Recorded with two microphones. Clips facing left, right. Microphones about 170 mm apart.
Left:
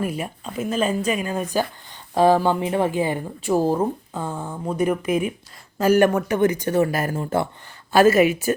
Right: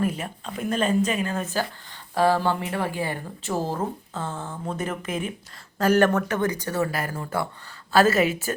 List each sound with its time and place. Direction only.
0.0 s speech: 10° left (ahead or behind); by 7.4 s 25° left (ahead or behind)
7.9 s speech: 15° left (ahead or behind)